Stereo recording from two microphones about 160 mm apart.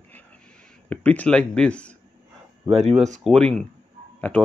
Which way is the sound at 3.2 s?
5° left (ahead or behind).